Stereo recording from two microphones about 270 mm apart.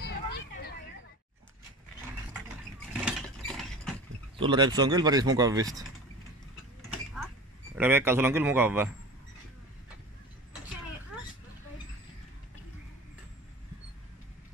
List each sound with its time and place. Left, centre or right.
0.0 s vehicle: left
2.9 s mechanisms: centre
4.4 s speech: centre
7.7 s speech: centre